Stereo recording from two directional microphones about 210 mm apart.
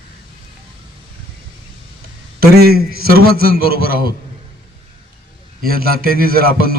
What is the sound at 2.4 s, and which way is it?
Speech, 45° right (ahead or behind).